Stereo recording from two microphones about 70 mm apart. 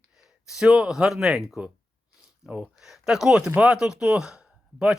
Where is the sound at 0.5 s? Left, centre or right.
Centre.